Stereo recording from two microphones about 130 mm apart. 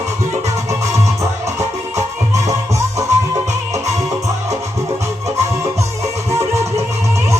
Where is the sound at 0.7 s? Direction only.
20° right (ahead or behind).